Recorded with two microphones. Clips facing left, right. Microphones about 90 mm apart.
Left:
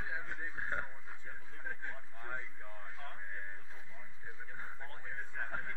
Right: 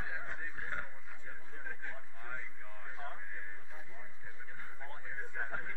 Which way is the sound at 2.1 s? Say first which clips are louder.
Left 3 dB; 20° left (ahead or behind).